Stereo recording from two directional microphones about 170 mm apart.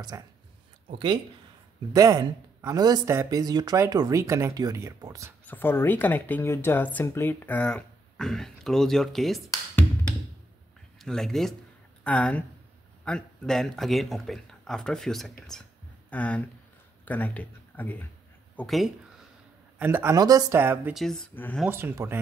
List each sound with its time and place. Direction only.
0.1 s speech: 20° right (ahead or behind)
5.5 s speech: 10° left (ahead or behind)
11.0 s a man's voice: centre (ahead or behind)
19.8 s speech: 15° right (ahead or behind)
20.9 s a man's voice: centre (ahead or behind)
21.6 s speech: 15° right (ahead or behind)